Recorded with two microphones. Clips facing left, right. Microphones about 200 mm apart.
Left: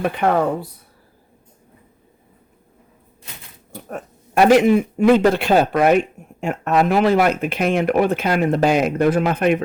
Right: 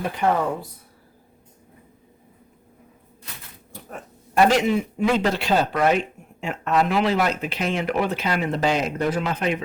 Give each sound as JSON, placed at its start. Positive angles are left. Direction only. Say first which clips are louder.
{"t": 0.0, "sound": "speech", "louder": "left 4 dB", "side_deg": 65}
{"t": 4.4, "sound": "speech", "louder": "left 10 dB", "side_deg": 55}